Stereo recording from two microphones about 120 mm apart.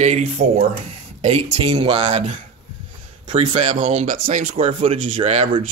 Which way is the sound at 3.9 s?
55° right (ahead or behind).